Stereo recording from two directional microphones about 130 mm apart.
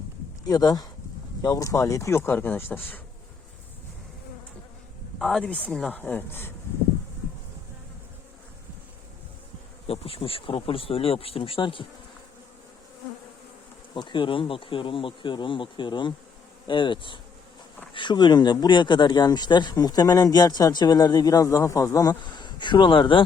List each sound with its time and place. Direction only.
0.4 s speech: 30° left (ahead or behind)
5.2 s speech: 5° left (ahead or behind)
9.8 s speech: 50° left (ahead or behind)
13.9 s speech: 40° left (ahead or behind)
22.2 s speech: 35° left (ahead or behind)